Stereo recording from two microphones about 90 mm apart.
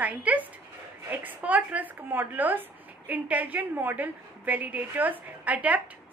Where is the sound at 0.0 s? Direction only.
15° right (ahead or behind).